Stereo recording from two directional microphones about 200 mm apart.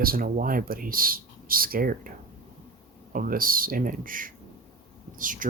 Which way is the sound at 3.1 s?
45° right (ahead or behind).